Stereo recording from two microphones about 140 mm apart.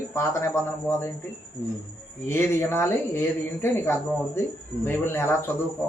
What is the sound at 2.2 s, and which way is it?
Speech, 15° left (ahead or behind).